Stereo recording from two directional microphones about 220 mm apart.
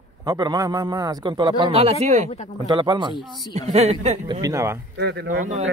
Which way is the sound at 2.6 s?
20° right (ahead or behind).